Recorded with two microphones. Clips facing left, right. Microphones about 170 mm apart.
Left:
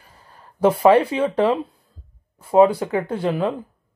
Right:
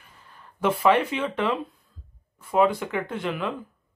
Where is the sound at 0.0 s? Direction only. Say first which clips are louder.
Left 3 dB; 30° left (ahead or behind).